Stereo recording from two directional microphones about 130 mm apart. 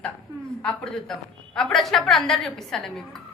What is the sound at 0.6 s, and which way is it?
A woman's voice, 5° left (ahead or behind).